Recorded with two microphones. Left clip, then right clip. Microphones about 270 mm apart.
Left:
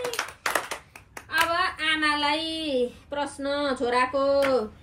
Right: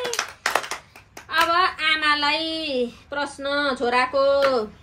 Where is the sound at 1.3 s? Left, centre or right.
Right.